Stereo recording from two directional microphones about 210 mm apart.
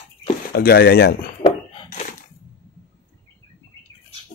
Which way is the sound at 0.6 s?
45° left (ahead or behind).